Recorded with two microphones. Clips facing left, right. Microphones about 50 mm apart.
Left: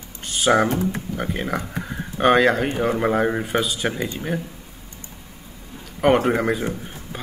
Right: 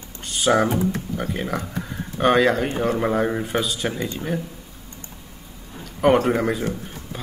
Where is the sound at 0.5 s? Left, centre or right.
Centre.